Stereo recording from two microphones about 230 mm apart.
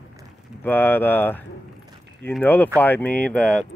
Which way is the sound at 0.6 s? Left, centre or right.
Centre.